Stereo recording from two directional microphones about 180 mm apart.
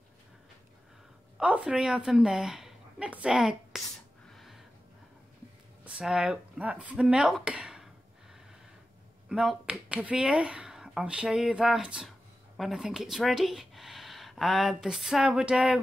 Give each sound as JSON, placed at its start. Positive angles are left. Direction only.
{"t": 1.4, "sound": "a woman's voice", "side_deg": -5}
{"t": 4.3, "sound": "a sound", "side_deg": 0}
{"t": 5.9, "sound": "speech", "side_deg": -5}
{"t": 9.3, "sound": "speech", "side_deg": -5}